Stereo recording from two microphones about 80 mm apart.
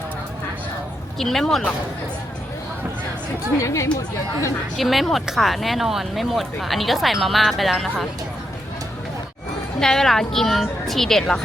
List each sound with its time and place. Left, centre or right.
1.2 s speech: centre
3.6 s speech: left
4.8 s speech: centre
9.8 s speech: centre